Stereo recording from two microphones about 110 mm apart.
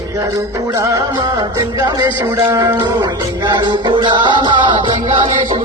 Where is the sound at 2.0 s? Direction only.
35° right (ahead or behind).